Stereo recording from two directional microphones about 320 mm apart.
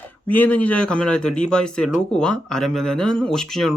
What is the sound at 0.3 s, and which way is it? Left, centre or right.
Speech, centre.